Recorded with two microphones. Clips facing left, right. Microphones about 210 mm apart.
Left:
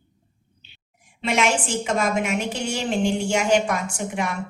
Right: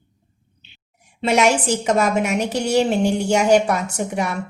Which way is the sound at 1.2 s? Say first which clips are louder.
Right 5 dB; 40° right (ahead or behind).